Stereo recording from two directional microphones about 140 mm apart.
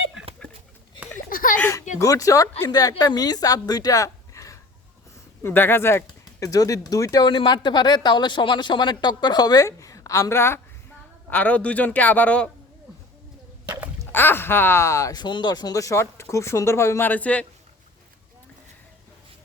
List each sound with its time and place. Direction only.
1.3 s a sound: 80° left
2.0 s a woman's voice: 25° left (ahead or behind)
14.1 s speech: 15° left (ahead or behind)